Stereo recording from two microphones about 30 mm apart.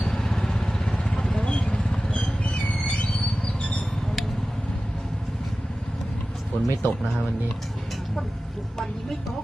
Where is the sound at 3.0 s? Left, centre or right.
Left.